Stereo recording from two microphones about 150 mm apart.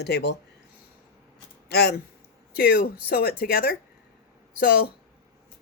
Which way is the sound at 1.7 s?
90° left.